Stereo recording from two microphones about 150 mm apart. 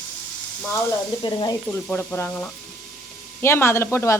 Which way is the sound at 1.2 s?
30° left (ahead or behind).